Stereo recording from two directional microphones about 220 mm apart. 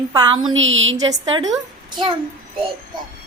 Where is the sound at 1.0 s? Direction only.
20° right (ahead or behind).